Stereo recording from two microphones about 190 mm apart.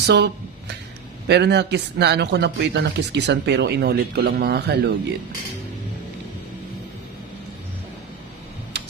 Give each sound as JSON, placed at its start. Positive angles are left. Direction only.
{"t": 0.0, "sound": "a man's voice", "side_deg": -60}
{"t": 8.7, "sound": "tick-tock", "side_deg": -60}